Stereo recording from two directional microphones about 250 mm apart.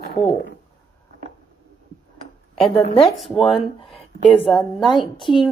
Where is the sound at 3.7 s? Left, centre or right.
Left.